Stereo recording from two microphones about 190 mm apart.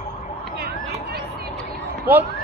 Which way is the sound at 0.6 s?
55° right (ahead or behind).